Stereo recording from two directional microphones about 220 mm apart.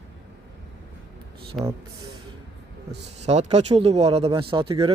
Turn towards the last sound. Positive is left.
turn(degrees=-25)  # may be behind; listen again after turning